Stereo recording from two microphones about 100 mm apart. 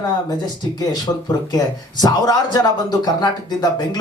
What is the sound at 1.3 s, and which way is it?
Speech, 40° left (ahead or behind).